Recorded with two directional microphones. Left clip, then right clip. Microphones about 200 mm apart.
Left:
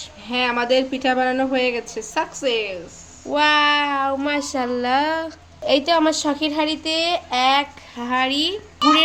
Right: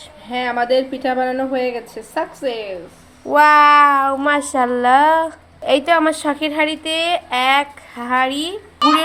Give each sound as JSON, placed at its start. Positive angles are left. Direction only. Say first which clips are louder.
{"t": 0.3, "sound": "speech", "louder": "right 2 dB", "side_deg": 20}
{"t": 3.2, "sound": "meow", "louder": "right 7 dB", "side_deg": -25}
{"t": 4.0, "sound": "a woman's voice", "louder": "right 5 dB", "side_deg": -10}